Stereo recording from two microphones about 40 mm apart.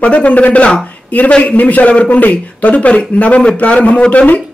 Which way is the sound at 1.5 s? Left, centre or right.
Left.